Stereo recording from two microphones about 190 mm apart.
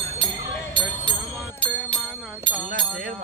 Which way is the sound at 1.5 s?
10° left (ahead or behind).